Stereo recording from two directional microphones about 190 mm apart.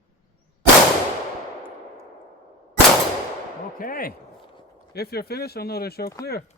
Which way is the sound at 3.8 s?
50° left (ahead or behind).